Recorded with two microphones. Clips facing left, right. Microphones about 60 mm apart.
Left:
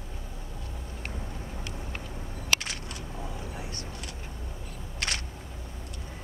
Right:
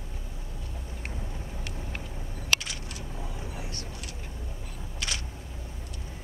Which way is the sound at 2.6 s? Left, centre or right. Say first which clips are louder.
Left 2 dB; left.